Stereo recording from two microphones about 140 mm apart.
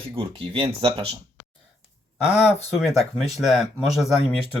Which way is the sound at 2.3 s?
50° left (ahead or behind).